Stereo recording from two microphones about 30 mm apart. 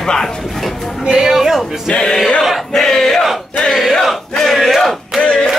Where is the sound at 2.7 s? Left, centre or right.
Centre.